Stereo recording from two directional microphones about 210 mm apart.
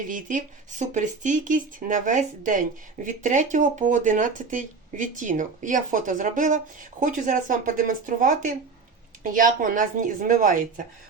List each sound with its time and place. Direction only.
0.1 s speech: 40° right (ahead or behind)